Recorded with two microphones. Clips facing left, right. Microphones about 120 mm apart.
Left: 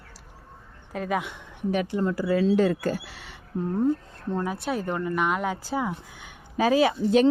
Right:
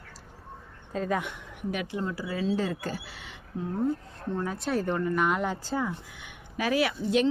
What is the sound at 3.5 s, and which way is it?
Speech, 50° left (ahead or behind).